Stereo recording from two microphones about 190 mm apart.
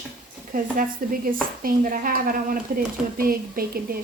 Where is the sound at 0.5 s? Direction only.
45° right (ahead or behind).